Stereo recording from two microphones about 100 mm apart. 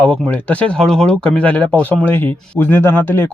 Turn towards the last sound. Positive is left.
turn(degrees=20)  # may be behind; listen again after turning